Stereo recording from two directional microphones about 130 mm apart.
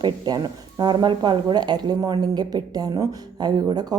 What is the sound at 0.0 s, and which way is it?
A woman's voice, 35° right (ahead or behind).